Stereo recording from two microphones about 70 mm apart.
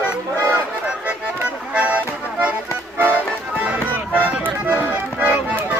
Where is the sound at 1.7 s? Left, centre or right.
Centre.